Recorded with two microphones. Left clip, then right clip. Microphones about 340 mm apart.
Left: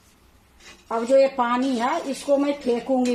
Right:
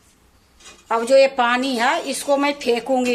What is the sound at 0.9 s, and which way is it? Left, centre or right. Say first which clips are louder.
Speech: right 4 dB; right.